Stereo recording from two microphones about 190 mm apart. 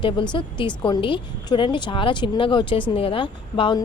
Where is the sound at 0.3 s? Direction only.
25° left (ahead or behind).